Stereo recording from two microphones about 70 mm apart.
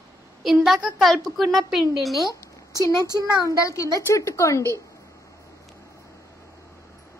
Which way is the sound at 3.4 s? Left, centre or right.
Left.